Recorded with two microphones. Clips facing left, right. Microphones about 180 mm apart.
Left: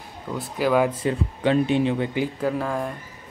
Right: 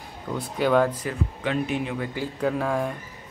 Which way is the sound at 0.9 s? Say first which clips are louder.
Left 5 dB; 30° left (ahead or behind).